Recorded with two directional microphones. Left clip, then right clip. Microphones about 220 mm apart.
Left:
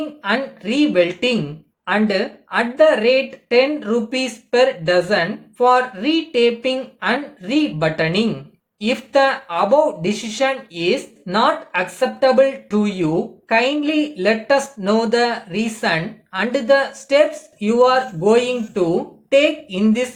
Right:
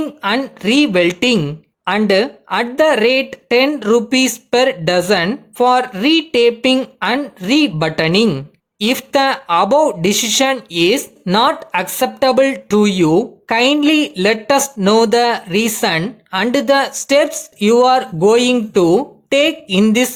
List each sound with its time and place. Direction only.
0.2 s speech: 50° right (ahead or behind)